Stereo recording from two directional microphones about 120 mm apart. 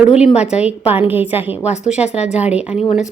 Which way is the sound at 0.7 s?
15° right (ahead or behind).